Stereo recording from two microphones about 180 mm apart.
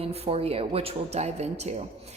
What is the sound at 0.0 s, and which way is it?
A woman's voice, 35° right (ahead or behind).